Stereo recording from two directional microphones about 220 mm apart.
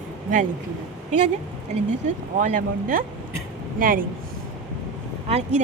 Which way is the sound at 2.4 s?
40° right (ahead or behind).